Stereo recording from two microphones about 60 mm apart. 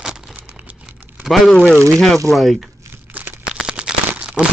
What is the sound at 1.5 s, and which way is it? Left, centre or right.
Speech, centre.